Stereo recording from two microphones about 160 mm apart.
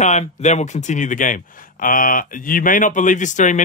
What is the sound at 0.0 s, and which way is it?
A man's voice, 45° left (ahead or behind).